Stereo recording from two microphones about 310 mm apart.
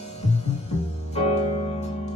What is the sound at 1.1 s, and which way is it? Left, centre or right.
Music, left.